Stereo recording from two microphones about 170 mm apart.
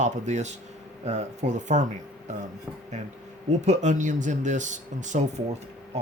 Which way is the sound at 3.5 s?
45° right (ahead or behind).